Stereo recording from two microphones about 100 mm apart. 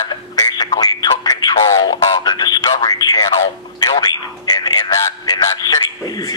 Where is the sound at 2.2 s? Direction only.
45° left (ahead or behind).